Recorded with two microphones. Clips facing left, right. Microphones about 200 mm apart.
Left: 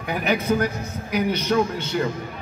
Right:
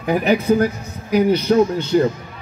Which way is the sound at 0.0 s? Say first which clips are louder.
Right 6 dB; 35° right (ahead or behind).